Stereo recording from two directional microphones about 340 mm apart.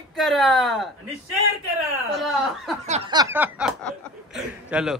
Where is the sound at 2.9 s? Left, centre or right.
Centre.